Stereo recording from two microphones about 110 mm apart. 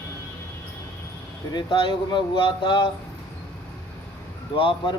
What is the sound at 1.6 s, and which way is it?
Speech, 45° left (ahead or behind).